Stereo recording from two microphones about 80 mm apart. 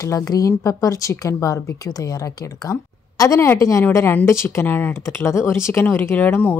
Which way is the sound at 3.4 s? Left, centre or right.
Left.